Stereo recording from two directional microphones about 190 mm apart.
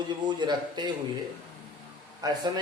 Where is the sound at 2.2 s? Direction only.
20° right (ahead or behind).